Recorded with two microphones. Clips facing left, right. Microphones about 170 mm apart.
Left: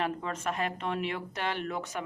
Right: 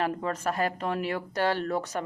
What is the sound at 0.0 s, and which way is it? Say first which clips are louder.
A woman's voice: right 4 dB; 35° right (ahead or behind).